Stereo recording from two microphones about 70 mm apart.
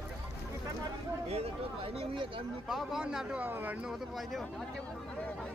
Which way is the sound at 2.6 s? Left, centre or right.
Centre.